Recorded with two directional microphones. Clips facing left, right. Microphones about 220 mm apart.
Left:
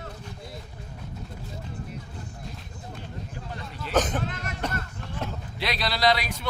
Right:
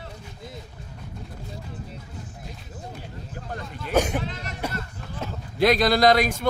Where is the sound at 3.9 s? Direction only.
10° right (ahead or behind).